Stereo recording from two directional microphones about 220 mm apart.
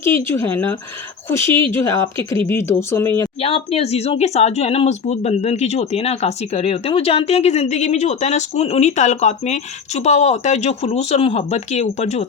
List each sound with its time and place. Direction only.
0.0 s speech: 10° left (ahead or behind)
3.4 s speech: 25° left (ahead or behind)